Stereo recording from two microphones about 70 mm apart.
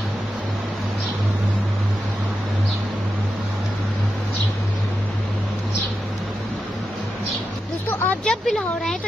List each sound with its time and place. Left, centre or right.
7.9 s vehicle: left
8.2 s speech: centre